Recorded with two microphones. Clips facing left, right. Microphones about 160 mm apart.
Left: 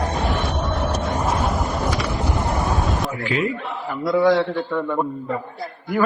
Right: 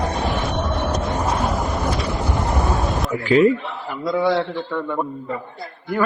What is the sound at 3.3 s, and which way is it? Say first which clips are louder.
Speech: right 10 dB; 35° right (ahead or behind).